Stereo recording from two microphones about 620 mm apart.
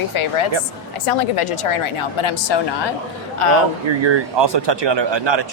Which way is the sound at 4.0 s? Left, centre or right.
Right.